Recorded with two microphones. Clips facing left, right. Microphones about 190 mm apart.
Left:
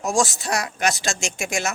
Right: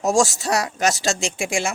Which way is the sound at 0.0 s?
40° right (ahead or behind).